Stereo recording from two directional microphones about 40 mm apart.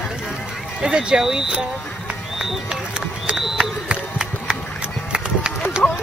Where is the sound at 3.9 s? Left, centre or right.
Right.